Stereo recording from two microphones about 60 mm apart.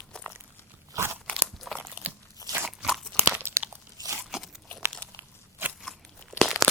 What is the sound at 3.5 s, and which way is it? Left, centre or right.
Crunch, right.